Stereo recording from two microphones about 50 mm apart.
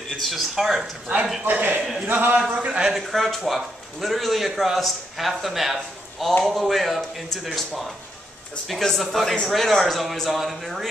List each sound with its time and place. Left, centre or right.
0.2 s a man's voice: centre
1.4 s speech: right
1.8 s a man's voice: centre
2.0 s speech: right
2.5 s a man's voice: right
2.9 s a man's voice: centre